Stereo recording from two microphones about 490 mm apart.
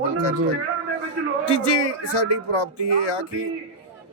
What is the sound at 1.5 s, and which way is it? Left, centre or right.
Speech, left.